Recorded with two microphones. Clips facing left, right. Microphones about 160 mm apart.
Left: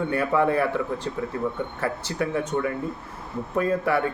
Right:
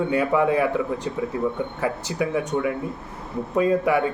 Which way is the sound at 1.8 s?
15° right (ahead or behind).